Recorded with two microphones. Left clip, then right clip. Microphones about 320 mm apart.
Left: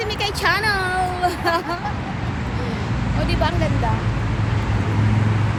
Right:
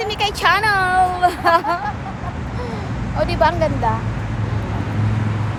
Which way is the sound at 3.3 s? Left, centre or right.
Centre.